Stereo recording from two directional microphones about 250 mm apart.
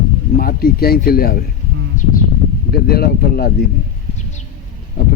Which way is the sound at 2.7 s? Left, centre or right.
Left.